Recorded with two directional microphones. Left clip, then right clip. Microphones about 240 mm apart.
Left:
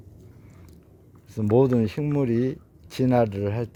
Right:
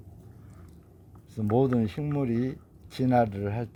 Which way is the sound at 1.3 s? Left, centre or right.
Left.